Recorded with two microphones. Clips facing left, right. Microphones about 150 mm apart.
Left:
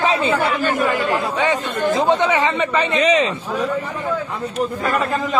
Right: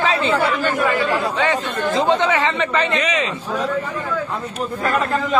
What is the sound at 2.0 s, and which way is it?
Speech, 20° left (ahead or behind).